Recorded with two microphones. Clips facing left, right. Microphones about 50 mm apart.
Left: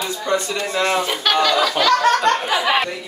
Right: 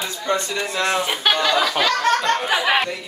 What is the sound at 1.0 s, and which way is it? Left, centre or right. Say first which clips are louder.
Speech: left 2 dB; centre.